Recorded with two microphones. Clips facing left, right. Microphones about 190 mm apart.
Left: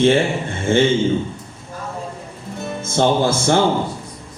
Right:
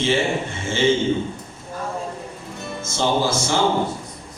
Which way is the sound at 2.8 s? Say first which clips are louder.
Left 4 dB; 55° left (ahead or behind).